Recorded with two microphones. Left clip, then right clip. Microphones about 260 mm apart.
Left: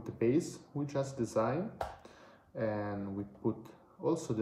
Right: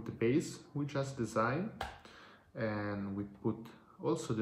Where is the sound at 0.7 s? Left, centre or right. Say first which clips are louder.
Left 1 dB; right.